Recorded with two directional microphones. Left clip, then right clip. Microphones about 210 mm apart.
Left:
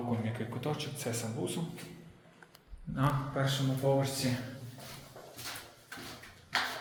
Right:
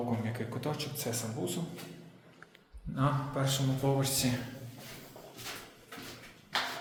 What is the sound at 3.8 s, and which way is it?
Speech, 20° right (ahead or behind).